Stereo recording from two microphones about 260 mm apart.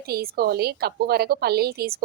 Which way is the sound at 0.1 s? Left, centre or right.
Right.